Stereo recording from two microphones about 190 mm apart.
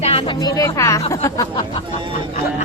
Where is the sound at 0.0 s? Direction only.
30° left (ahead or behind).